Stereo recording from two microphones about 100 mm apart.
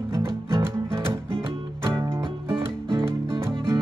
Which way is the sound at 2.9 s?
55° right (ahead or behind).